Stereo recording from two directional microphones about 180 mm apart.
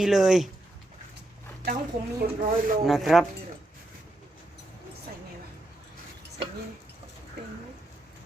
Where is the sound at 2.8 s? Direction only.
Centre (ahead or behind).